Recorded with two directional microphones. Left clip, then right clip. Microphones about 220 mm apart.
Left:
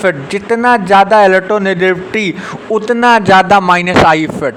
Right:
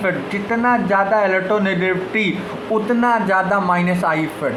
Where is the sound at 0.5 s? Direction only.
50° left (ahead or behind).